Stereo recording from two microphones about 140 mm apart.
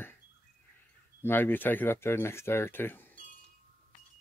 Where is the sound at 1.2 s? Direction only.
15° left (ahead or behind).